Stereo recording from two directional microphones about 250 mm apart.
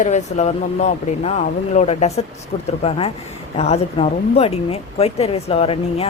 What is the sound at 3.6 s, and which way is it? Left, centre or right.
Speech, left.